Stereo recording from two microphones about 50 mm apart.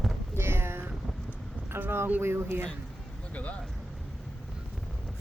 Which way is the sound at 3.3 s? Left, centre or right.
Left.